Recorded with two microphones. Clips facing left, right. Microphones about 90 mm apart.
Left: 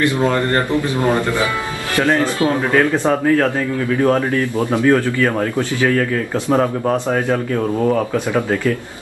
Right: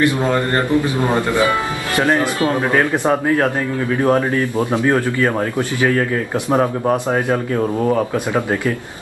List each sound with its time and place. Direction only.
0.0 s speech: 20° right (ahead or behind)